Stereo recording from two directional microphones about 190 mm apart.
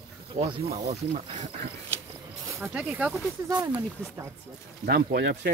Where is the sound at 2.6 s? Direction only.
5° right (ahead or behind).